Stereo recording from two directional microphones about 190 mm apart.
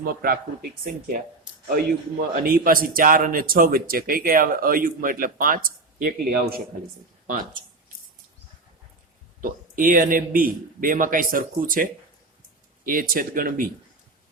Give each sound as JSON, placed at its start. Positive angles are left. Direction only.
{"t": 0.0, "sound": "speech", "side_deg": -50}
{"t": 1.6, "sound": "speech", "side_deg": -50}
{"t": 9.4, "sound": "speech", "side_deg": -45}